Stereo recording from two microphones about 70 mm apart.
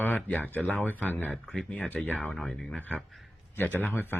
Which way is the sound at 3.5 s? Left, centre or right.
Left.